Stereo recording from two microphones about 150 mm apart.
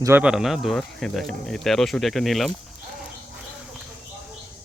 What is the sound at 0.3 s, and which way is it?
Speech, centre (ahead or behind).